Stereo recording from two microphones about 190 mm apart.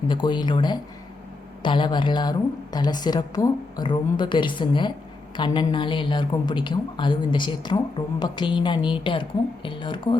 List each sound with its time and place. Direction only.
0.1 s a woman's voice: 25° left (ahead or behind)